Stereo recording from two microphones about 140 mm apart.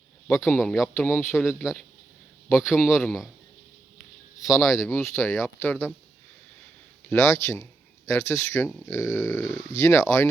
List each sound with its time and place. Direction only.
0.3 s speech: 5° left (ahead or behind)
1.5 s a man's voice: centre (ahead or behind)
4.4 s speech: centre (ahead or behind)
4.8 s speech: 15° left (ahead or behind)
7.1 s speech: 20° left (ahead or behind)